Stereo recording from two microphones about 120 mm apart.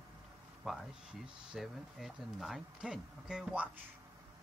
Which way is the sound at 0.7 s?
Centre (ahead or behind).